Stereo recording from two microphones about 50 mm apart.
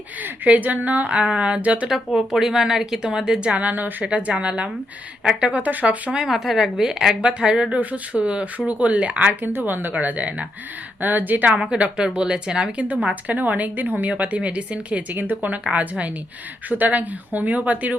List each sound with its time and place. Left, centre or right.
0.2 s speech: right
2.1 s speech: centre
3.5 s a woman's voice: right
6.2 s speech: centre
7.2 s speech: right
7.7 s speech: right
9.5 s a woman's voice: right
11.8 s speech: right
13.2 s a woman's voice: right
15.1 s a woman's voice: right